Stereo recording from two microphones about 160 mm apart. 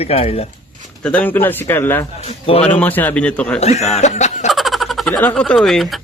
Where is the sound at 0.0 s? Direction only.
40° left (ahead or behind).